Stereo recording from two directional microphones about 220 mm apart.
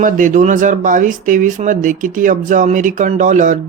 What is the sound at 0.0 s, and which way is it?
Speech, 35° right (ahead or behind).